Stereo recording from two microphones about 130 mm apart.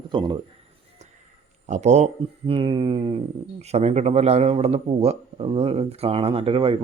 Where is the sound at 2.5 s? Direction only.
45° right (ahead or behind).